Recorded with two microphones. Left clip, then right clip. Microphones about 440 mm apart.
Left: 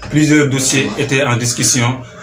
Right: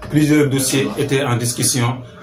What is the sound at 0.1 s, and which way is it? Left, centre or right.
Speech, right.